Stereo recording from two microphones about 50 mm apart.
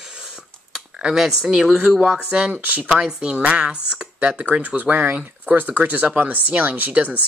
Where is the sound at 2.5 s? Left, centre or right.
Right.